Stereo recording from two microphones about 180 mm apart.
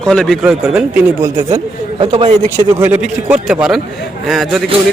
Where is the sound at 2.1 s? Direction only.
35° right (ahead or behind).